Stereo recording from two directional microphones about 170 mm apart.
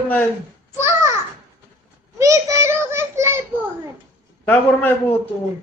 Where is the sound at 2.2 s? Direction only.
15° right (ahead or behind).